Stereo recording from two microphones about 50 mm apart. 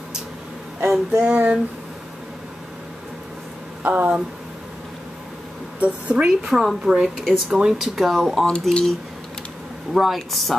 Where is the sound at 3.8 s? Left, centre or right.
Right.